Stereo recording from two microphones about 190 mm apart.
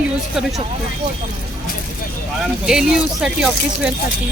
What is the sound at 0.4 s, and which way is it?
Speech, centre (ahead or behind).